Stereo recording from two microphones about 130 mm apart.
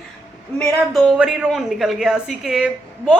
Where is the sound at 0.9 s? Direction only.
Centre (ahead or behind).